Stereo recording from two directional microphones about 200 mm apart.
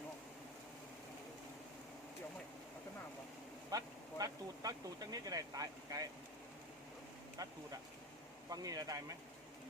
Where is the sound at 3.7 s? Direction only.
20° right (ahead or behind).